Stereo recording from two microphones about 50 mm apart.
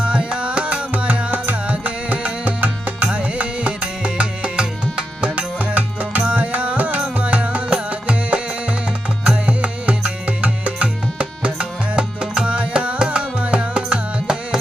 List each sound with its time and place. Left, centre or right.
0.0 s music: right